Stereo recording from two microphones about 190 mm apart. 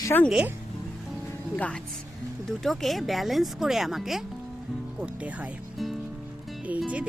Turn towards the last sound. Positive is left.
turn(degrees=-5)  # may be behind; listen again after turning